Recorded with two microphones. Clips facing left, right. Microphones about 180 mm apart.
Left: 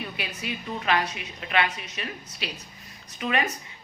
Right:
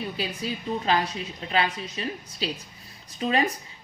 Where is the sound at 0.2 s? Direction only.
30° right (ahead or behind).